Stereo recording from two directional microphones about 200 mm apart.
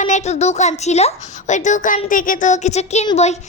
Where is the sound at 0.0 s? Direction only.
35° left (ahead or behind).